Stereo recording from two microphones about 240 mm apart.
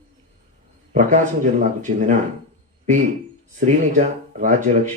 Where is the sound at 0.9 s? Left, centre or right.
Right.